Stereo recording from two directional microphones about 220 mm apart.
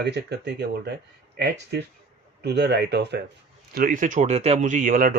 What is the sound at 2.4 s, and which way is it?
Speech, 50° right (ahead or behind).